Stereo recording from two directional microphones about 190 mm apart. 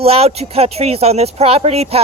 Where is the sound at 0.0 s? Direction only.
30° right (ahead or behind).